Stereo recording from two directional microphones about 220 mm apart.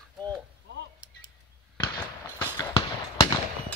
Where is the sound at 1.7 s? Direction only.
15° left (ahead or behind).